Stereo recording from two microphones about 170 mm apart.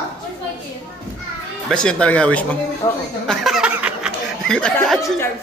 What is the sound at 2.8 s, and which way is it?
Speech, 25° left (ahead or behind).